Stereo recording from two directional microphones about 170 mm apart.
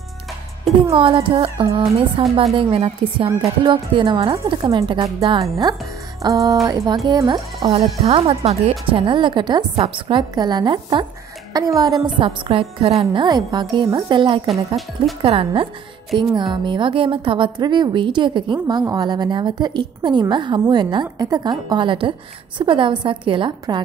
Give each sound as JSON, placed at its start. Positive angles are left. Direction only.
{"t": 0.9, "sound": "a woman's voice", "side_deg": -30}
{"t": 8.0, "sound": "a woman's voice", "side_deg": -35}